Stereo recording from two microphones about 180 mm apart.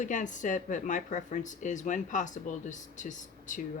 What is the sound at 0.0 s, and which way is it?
Speech, 45° left (ahead or behind).